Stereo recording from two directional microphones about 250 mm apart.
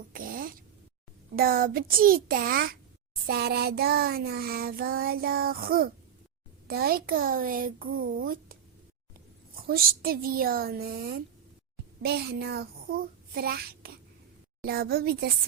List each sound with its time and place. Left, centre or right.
0.1 s throat clearing: right
1.4 s child singing: right
9.6 s child singing: right
12.0 s a child's voice: right
14.6 s child singing: right